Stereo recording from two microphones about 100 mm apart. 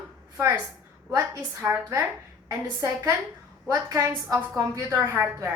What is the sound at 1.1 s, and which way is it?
A woman's voice, 30° right (ahead or behind).